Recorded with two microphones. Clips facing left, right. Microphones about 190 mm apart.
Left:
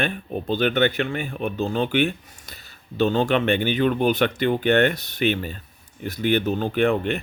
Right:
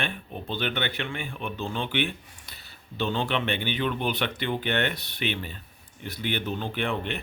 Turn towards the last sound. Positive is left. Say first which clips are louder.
# left 9 dB
turn(degrees=45)  # may be behind; listen again after turning